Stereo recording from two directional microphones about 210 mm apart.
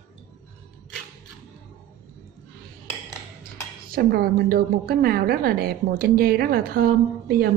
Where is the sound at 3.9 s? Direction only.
45° right (ahead or behind).